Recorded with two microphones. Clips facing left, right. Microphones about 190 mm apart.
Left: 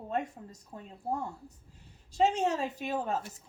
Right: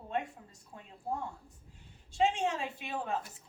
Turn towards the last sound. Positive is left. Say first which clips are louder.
# left 4 dB
turn(degrees=40)  # may be behind; listen again after turning